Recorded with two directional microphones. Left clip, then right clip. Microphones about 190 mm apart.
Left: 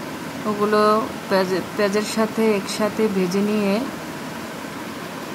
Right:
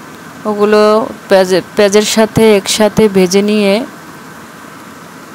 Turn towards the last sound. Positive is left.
turn(degrees=-35)  # may be behind; listen again after turning